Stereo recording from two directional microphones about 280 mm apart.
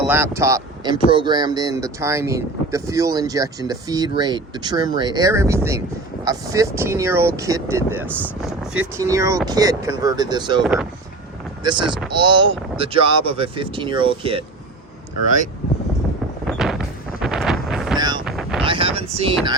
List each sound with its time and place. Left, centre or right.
0.1 s speech: centre
10.6 s speech: centre
11.6 s speech: centre
16.5 s wind noise: centre
18.6 s wind noise: centre